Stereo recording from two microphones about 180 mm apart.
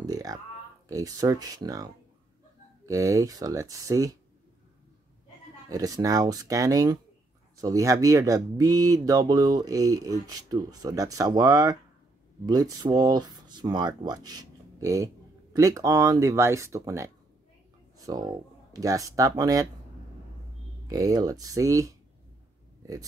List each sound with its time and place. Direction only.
0.0 s a sound: 20° right (ahead or behind)
0.8 s speech: 20° right (ahead or behind)
2.9 s speech: 20° right (ahead or behind)
5.7 s speech: 20° right (ahead or behind)
20.8 s speech: 20° right (ahead or behind)